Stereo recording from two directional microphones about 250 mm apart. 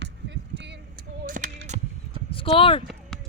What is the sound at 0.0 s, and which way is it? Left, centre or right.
Basketball bounce, right.